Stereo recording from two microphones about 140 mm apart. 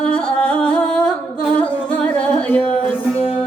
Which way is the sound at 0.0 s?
10° left (ahead or behind).